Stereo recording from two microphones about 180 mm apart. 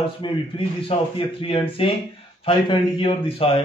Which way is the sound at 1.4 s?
30° left (ahead or behind).